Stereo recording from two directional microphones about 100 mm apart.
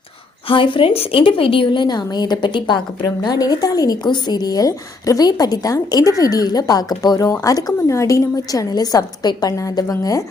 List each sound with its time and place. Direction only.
0.4 s a woman's voice: 55° left (ahead or behind); by 10.2 s 35° left (ahead or behind)